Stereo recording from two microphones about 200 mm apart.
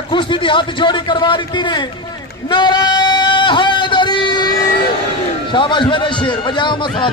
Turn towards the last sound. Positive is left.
turn(degrees=25)  # may be behind; listen again after turning